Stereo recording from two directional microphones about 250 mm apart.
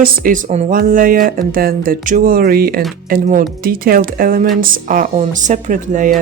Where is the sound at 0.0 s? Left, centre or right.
Right.